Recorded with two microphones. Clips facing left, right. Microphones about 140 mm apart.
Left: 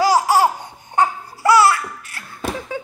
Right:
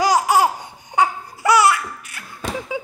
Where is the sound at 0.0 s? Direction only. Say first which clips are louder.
Left 1 dB; 15° right (ahead or behind).